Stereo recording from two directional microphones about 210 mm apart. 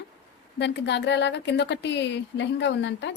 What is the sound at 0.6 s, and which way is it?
A woman's voice, 55° left (ahead or behind).